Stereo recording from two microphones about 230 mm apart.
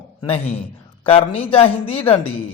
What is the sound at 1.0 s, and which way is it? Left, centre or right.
A man's voice, left.